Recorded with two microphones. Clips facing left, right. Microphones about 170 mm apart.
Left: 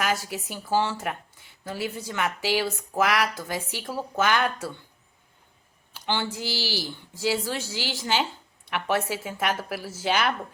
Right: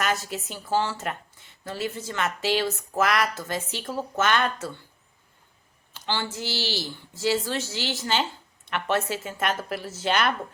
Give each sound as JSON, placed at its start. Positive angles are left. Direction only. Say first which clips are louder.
{"t": 0.0, "sound": "a woman's voice", "louder": "even", "side_deg": 10}
{"t": 5.9, "sound": "a woman's voice", "louder": "left 1 dB", "side_deg": 15}